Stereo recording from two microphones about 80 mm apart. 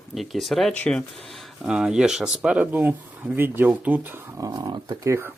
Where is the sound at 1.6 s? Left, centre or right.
Centre; by 3.7 s right.